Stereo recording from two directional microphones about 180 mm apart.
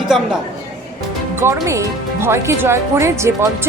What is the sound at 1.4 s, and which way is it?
Speech, 15° right (ahead or behind).